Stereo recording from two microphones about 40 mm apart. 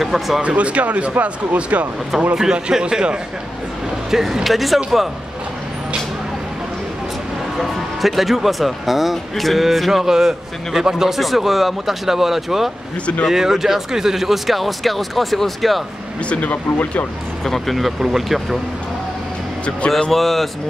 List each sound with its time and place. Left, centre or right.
0.0 s speech: centre
0.4 s speech: right
2.3 s a man's voice: centre
4.1 s speech: centre
7.5 s speech: centre
11.1 s speech: centre
16.3 s speech: left
17.5 s speech: centre
20.1 s speech: centre